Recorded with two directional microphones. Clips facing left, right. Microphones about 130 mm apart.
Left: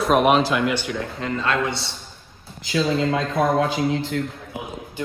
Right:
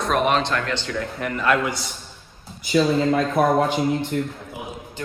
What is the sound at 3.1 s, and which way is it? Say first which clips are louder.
Speech: right 2 dB; 90° left.